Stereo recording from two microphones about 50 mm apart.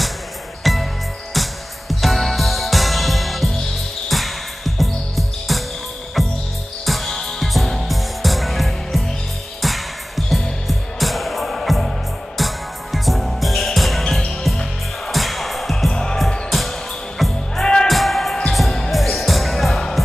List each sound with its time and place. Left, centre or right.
0.7 s music: centre
15.9 s music: centre
16.4 s music: centre